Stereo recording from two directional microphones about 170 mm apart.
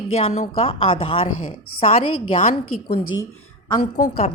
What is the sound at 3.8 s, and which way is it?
Speech, 45° left (ahead or behind).